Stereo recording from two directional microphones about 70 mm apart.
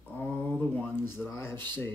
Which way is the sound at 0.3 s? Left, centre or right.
Centre.